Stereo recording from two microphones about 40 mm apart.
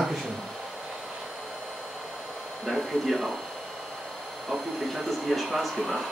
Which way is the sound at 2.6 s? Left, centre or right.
Centre.